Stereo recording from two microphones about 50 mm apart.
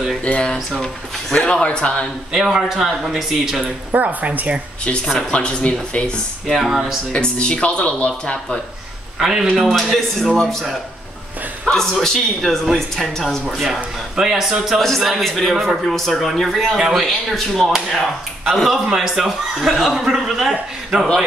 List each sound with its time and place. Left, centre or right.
0.2 s speech: left
2.5 s speech: centre
3.6 s speech: right
5.3 s speech: left
6.4 s a man's voice: centre
7.1 s speech: left
9.2 s speech: centre
9.6 s a man's voice: centre
11.6 s a man's voice: centre